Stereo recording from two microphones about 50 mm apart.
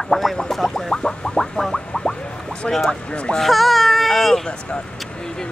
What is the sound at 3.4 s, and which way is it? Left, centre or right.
Speech, centre.